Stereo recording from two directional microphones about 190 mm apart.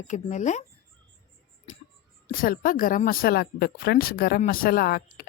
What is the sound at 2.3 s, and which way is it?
Speech, 50° left (ahead or behind).